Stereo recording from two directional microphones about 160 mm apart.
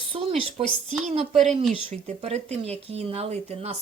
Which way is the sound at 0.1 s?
35° right (ahead or behind).